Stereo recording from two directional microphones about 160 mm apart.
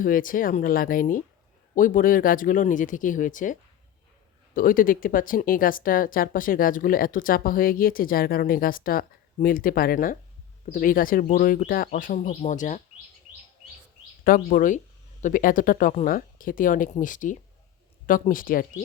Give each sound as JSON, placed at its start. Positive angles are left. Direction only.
{"t": 0.0, "sound": "speech", "side_deg": 60}
{"t": 14.3, "sound": "speech", "side_deg": 60}